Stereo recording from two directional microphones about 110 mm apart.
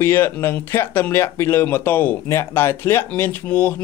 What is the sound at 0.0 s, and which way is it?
Speech, 20° left (ahead or behind).